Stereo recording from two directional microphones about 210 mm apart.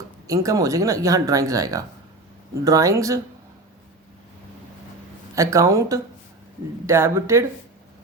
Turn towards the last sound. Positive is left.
turn(degrees=-15)  # may be behind; listen again after turning